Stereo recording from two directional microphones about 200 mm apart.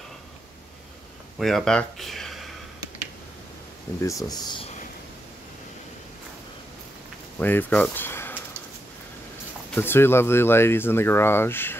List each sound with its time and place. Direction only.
1.4 s speech: centre (ahead or behind)
4.0 s speech: 15° left (ahead or behind)
7.3 s speech: 10° left (ahead or behind)
9.8 s speech: 10° left (ahead or behind)